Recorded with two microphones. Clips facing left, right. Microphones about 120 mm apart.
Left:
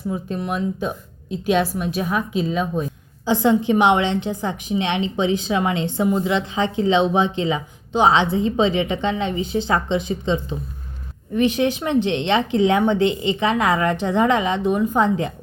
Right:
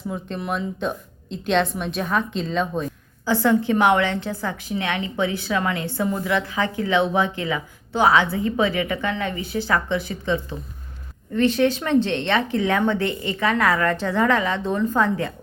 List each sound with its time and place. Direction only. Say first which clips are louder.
0.1 s a woman's voice: left 3 dB; centre (ahead or behind)
3.2 s a woman's voice: left 2 dB; 20° left (ahead or behind)